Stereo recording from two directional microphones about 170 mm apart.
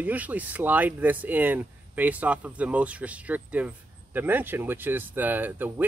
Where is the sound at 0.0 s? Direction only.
10° right (ahead or behind).